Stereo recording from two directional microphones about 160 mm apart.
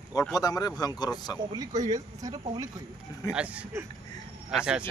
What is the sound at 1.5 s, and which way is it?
Speech, 25° right (ahead or behind).